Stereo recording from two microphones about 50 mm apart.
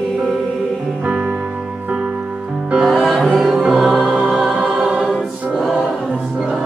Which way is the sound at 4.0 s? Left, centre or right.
Centre.